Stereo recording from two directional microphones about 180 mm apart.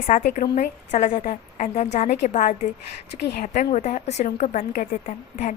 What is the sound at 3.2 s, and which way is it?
Speech, 65° left (ahead or behind).